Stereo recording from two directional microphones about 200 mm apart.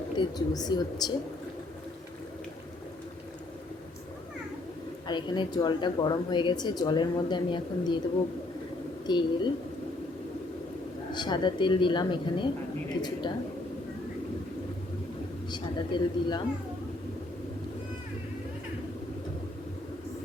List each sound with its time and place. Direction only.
0.2 s a woman's voice: 20° left (ahead or behind)
5.0 s a woman's voice: 20° left (ahead or behind)
9.0 s a woman's voice: 20° left (ahead or behind)
11.1 s a woman's voice: 20° left (ahead or behind)
15.4 s a man's voice: 20° left (ahead or behind)